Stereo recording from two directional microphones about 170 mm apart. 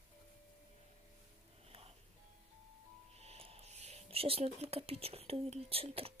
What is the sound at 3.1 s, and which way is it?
Speech, 35° right (ahead or behind).